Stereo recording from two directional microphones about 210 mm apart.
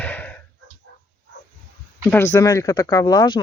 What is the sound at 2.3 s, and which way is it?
Speech, 15° left (ahead or behind).